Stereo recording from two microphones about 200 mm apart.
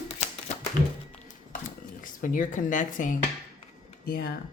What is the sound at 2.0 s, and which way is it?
Speech, 40° left (ahead or behind).